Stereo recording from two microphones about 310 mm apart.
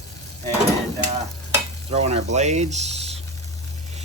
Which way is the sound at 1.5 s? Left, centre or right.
Right.